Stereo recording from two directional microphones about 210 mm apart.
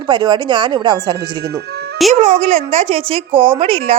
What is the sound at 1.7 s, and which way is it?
Music, 50° right (ahead or behind).